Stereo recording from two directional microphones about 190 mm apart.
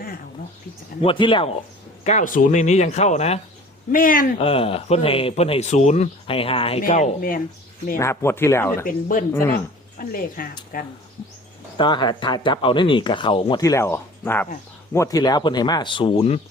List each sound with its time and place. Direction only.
1.0 s speech: 25° left (ahead or behind)
2.0 s speech: 40° left (ahead or behind)
3.9 s speech: 45° left (ahead or behind)
4.4 s speech: 30° left (ahead or behind)
6.8 s speech: 40° left (ahead or behind)
7.9 s speech: 15° left (ahead or behind)
10.0 s speech: 50° left (ahead or behind)
11.8 s speech: 25° left (ahead or behind)